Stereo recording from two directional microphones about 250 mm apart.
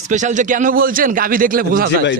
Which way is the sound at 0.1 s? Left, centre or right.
Right.